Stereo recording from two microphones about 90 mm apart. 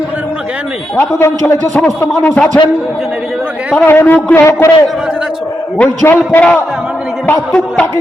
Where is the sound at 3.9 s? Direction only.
25° left (ahead or behind).